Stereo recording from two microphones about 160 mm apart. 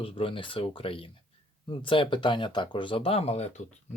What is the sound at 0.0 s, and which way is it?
Speech, 35° left (ahead or behind).